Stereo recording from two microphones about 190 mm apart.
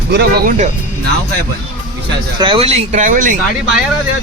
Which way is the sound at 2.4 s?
30° right (ahead or behind).